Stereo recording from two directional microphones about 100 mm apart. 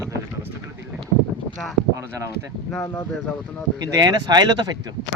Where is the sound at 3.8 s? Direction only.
35° right (ahead or behind).